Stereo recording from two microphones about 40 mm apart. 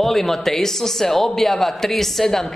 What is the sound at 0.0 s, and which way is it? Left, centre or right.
A man's voice, centre.